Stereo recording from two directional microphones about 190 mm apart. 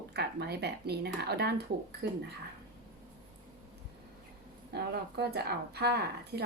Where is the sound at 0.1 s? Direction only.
60° right (ahead or behind).